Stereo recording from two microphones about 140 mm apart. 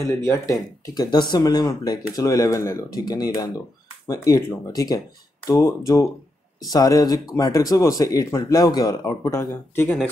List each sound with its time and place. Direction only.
0.0 s speech: 20° left (ahead or behind)